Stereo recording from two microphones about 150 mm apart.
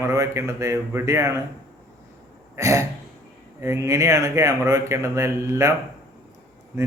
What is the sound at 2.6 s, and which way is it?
A man's voice, 20° right (ahead or behind).